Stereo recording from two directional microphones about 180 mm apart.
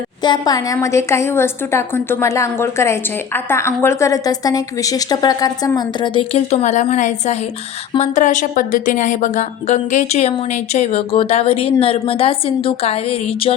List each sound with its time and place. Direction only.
0.2 s a woman's voice: 20° left (ahead or behind)
6.3 s speech: 40° left (ahead or behind)